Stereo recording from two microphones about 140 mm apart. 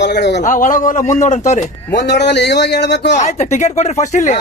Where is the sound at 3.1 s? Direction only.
55° left (ahead or behind).